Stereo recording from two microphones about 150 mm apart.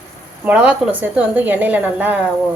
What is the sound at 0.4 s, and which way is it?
A woman's voice, 10° right (ahead or behind).